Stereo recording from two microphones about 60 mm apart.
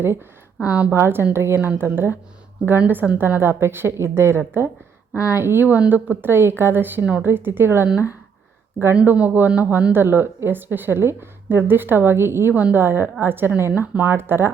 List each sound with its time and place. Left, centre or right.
0.6 s speech: right
0.9 s a woman's voice: right
5.7 s a woman's voice: right
7.0 s speech: right
7.3 s a woman's voice: right
9.0 s a woman's voice: right